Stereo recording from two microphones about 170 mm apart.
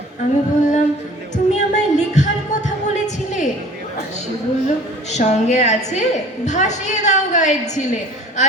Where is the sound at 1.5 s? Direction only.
45° left (ahead or behind).